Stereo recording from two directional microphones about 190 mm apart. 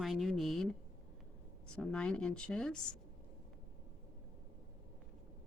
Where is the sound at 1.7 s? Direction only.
5° left (ahead or behind).